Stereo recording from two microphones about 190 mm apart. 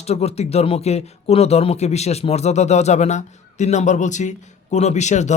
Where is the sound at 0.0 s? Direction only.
35° left (ahead or behind).